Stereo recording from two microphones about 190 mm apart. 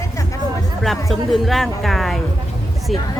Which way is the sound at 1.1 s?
Centre (ahead or behind).